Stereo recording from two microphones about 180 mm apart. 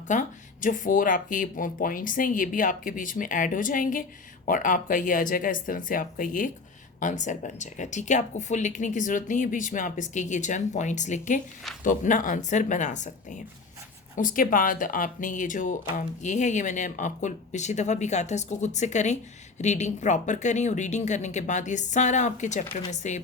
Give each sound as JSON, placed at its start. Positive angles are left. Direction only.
{"t": 0.1, "sound": "speech", "side_deg": 45}